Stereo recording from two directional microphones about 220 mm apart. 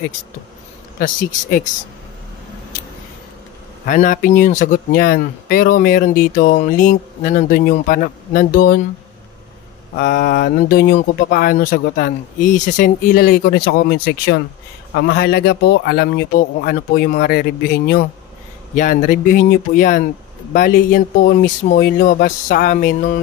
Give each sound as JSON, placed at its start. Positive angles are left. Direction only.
{"t": 0.9, "sound": "speech", "side_deg": 40}
{"t": 3.8, "sound": "speech", "side_deg": 35}
{"t": 9.9, "sound": "a man's voice", "side_deg": 45}